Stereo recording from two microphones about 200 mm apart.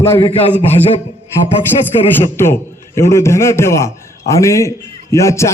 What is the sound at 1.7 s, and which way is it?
Speech, 30° left (ahead or behind).